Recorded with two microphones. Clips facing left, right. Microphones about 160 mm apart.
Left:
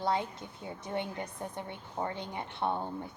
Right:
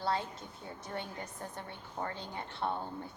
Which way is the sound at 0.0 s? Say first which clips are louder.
Left 3 dB; 15° left (ahead or behind).